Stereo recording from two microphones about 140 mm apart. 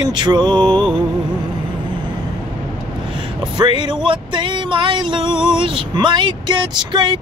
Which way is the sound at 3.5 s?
35° right (ahead or behind).